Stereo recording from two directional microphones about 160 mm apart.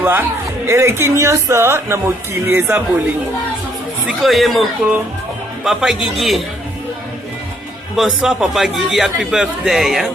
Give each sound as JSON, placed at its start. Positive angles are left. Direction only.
{"t": 0.0, "sound": "speech", "side_deg": -10}
{"t": 4.0, "sound": "a man's voice", "side_deg": 0}
{"t": 7.9, "sound": "a man's voice", "side_deg": -5}